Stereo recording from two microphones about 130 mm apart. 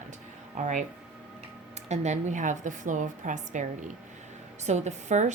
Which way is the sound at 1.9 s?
60° right (ahead or behind).